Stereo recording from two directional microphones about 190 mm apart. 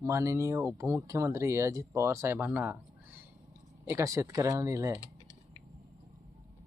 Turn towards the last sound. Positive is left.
turn(degrees=15)  # may be behind; listen again after turning